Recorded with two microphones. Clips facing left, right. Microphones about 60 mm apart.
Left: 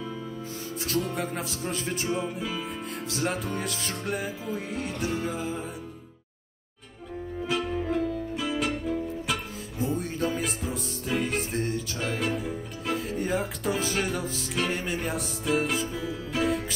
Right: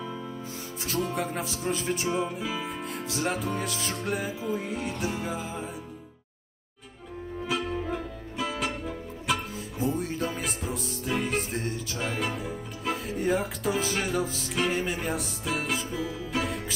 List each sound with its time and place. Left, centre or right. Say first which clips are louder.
0.8 s music: even; centre
7.4 s music: left 2 dB; centre
12.4 s speech: left 2 dB; centre